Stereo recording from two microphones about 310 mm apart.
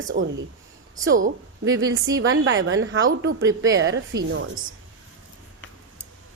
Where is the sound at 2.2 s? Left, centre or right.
Right.